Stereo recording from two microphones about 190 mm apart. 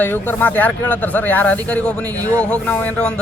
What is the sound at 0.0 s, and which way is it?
A man's voice, 10° left (ahead or behind).